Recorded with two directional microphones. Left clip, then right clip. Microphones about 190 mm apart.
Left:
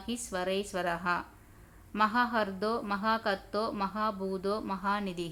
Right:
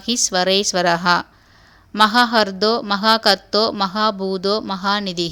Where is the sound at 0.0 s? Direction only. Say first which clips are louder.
Right 16 dB; 40° right (ahead or behind).